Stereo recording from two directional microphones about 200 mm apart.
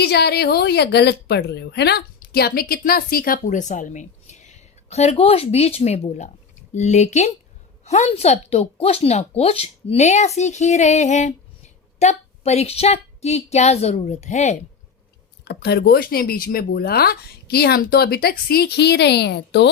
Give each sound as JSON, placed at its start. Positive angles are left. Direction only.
{"t": 0.0, "sound": "a woman's voice", "side_deg": 55}
{"t": 15.4, "sound": "a woman's voice", "side_deg": 55}